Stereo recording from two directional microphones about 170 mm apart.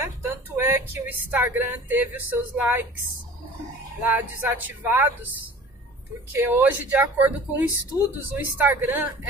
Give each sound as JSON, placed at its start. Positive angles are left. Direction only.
{"t": 0.0, "sound": "a woman's voice", "side_deg": -15}
{"t": 4.0, "sound": "speech", "side_deg": -10}
{"t": 6.3, "sound": "speech", "side_deg": -10}